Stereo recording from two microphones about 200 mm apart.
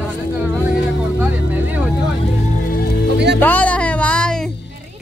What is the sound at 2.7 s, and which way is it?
Music, 45° left (ahead or behind).